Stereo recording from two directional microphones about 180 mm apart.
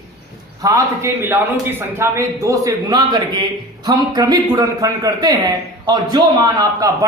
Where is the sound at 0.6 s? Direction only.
20° right (ahead or behind).